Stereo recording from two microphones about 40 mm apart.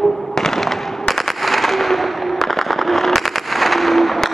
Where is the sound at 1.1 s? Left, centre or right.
Centre.